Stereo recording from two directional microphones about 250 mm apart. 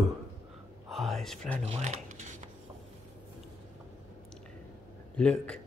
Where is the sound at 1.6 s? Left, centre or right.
Right.